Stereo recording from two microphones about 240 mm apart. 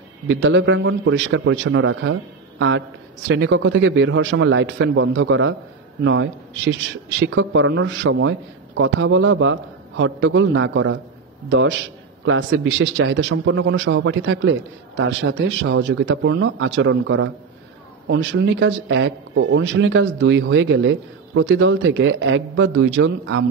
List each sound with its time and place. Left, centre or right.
0.3 s a man's voice: right